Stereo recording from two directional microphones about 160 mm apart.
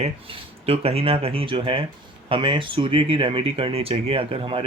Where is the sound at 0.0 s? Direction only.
35° right (ahead or behind).